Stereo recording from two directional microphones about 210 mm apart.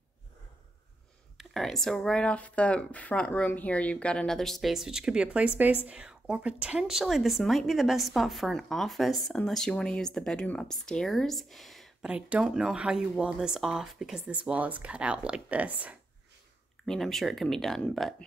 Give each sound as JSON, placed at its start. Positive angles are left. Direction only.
{"t": 1.4, "sound": "a woman's voice", "side_deg": 0}